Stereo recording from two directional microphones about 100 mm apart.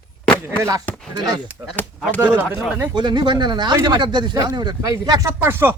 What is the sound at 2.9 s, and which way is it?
A man's voice, 45° right (ahead or behind).